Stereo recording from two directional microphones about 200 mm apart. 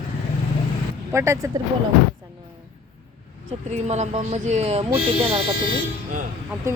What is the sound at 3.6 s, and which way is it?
Speech, 35° right (ahead or behind).